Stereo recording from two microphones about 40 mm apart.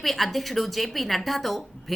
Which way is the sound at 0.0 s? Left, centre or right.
Centre.